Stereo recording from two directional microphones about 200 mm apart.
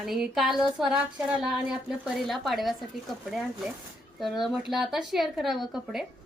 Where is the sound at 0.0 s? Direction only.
Centre (ahead or behind).